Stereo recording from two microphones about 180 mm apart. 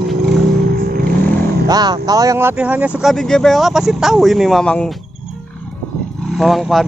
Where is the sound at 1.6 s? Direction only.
20° right (ahead or behind).